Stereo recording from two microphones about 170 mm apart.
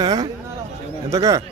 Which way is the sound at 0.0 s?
25° right (ahead or behind).